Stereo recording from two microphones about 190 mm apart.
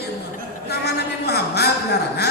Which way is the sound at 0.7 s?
60° left (ahead or behind).